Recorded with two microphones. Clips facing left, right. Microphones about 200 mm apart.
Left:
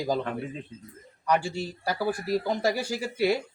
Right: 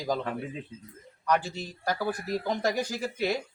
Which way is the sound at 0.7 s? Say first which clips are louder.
Left 1 dB; 55° left (ahead or behind).